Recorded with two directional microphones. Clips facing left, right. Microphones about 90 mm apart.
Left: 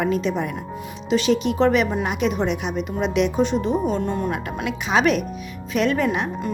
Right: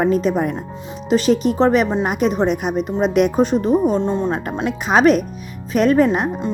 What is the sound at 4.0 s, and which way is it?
Speech, 25° right (ahead or behind).